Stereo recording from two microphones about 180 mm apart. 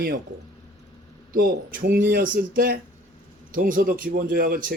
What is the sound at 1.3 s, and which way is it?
Speech, 50° right (ahead or behind).